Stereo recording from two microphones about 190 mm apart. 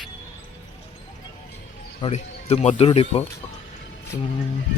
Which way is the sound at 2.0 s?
35° left (ahead or behind).